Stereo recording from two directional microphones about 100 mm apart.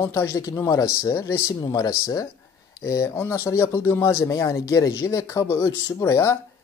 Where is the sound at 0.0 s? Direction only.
30° left (ahead or behind).